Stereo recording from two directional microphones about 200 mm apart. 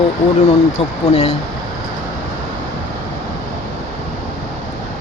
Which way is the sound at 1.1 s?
30° left (ahead or behind).